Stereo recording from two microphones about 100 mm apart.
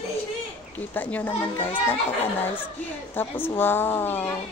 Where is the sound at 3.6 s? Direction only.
20° left (ahead or behind).